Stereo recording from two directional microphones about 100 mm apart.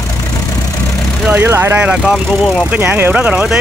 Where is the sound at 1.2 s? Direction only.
20° right (ahead or behind).